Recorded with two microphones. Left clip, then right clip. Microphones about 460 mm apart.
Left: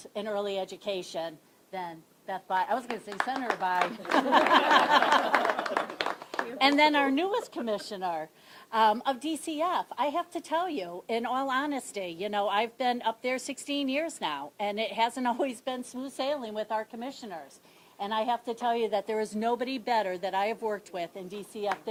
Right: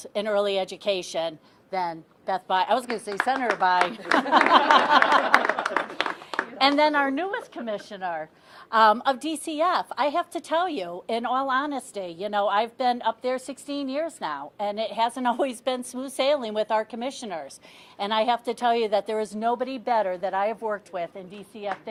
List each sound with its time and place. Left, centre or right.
0.0 s a woman's voice: right
6.6 s a woman's voice: right
8.7 s a woman's voice: right